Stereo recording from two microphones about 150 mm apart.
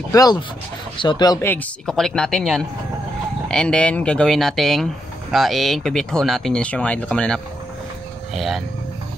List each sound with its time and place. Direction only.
0.1 s speech: 25° left (ahead or behind)
1.5 s speech: 5° left (ahead or behind)